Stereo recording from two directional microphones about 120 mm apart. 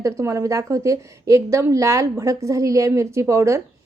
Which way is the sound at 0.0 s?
25° right (ahead or behind).